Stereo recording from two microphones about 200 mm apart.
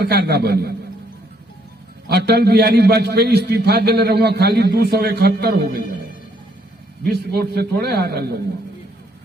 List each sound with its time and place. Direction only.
0.0 s a man's voice: 55° right (ahead or behind)
2.0 s a man's voice: 55° right (ahead or behind)
7.0 s a man's voice: 50° right (ahead or behind)